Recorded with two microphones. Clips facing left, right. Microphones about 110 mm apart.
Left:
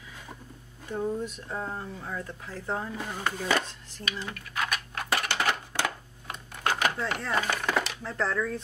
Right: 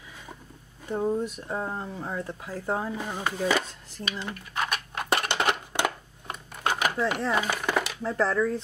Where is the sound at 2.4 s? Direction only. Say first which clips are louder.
Right 4 dB; 15° right (ahead or behind).